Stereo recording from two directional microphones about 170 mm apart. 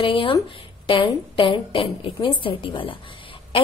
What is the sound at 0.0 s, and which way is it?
A woman's voice, 30° left (ahead or behind).